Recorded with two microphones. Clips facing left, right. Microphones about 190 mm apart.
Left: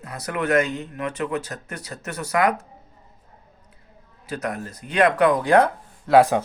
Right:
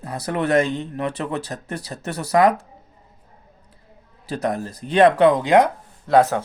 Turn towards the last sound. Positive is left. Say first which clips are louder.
# left 1 dB
turn(degrees=10)  # may be behind; listen again after turning